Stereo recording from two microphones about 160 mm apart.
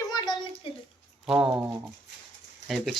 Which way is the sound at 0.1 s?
25° left (ahead or behind).